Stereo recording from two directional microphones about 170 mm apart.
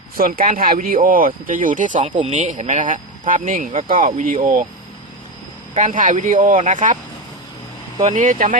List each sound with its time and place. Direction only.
0.2 s speech: 55° right (ahead or behind)
5.7 s speech: 50° right (ahead or behind)
8.0 s speech: 50° right (ahead or behind)